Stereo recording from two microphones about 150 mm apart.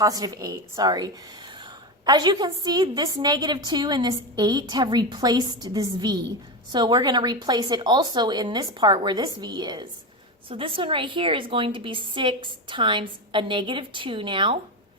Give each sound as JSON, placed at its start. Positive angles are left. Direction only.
{"t": 0.0, "sound": "a woman's voice", "side_deg": -25}